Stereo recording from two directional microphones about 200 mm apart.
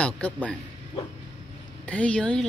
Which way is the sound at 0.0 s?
5° left (ahead or behind).